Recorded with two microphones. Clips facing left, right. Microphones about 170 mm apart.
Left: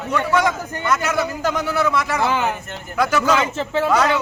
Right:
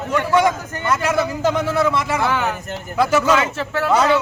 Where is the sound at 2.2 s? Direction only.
20° left (ahead or behind).